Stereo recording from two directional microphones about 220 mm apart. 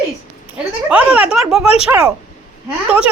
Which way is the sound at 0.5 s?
5° right (ahead or behind).